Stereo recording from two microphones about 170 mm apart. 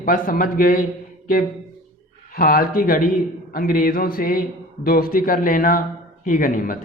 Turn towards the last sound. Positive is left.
turn(degrees=55)  # may be behind; listen again after turning